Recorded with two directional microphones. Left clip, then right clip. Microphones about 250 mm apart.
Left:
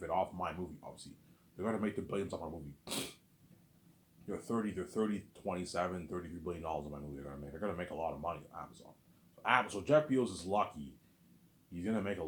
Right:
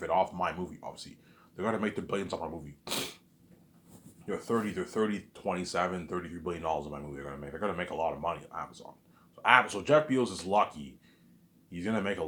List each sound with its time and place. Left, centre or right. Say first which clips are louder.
0.0 s speech: right 7 dB; right
4.3 s speech: right 7 dB; right
11.7 s speech: right 6 dB; right